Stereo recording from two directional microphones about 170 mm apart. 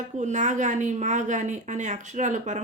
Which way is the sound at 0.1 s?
45° right (ahead or behind).